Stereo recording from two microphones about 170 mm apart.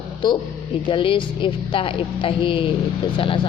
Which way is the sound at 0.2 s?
25° left (ahead or behind).